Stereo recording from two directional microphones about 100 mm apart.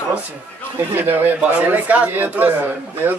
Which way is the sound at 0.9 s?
20° right (ahead or behind).